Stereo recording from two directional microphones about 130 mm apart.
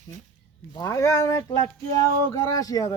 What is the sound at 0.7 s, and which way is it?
A man's voice, 25° left (ahead or behind).